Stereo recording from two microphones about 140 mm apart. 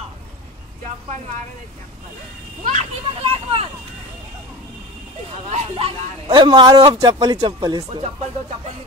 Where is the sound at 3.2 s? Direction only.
40° right (ahead or behind).